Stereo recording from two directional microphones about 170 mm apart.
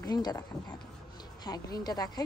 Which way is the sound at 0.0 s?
25° left (ahead or behind).